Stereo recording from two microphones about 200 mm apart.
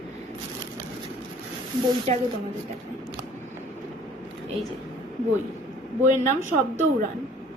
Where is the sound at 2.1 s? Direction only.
35° right (ahead or behind).